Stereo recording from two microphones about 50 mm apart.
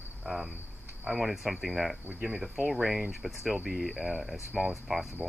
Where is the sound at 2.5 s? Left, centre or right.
Centre.